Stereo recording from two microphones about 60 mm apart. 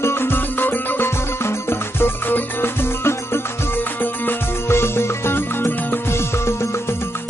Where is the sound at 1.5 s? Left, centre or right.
Left.